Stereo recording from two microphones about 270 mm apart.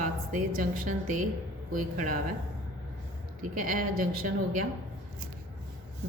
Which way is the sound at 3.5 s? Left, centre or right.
Right.